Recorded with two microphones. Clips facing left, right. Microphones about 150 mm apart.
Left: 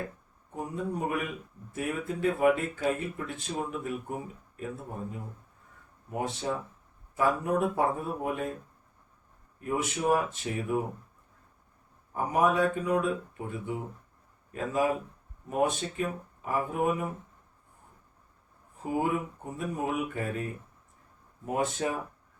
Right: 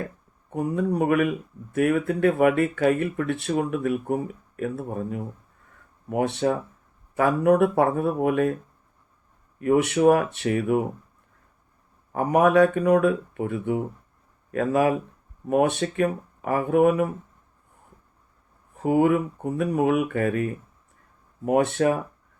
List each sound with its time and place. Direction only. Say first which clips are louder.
0.5 s speech: right 9 dB; 70° right (ahead or behind)
9.6 s speech: right 11 dB; 75° right (ahead or behind)
12.1 s speech: right 8 dB; 70° right (ahead or behind)
18.8 s speech: right 9 dB; 75° right (ahead or behind)